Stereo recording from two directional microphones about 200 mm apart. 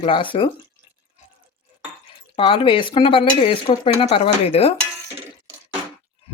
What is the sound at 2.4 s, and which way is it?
Speech, 25° left (ahead or behind).